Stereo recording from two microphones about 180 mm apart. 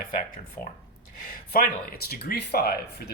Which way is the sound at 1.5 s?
55° left (ahead or behind).